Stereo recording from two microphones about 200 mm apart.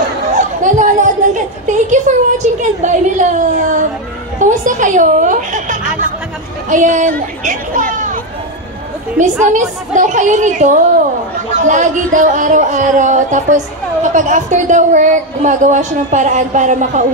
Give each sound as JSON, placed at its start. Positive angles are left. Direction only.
{"t": 0.4, "sound": "a woman's voice", "side_deg": -40}
{"t": 9.4, "sound": "speech", "side_deg": -40}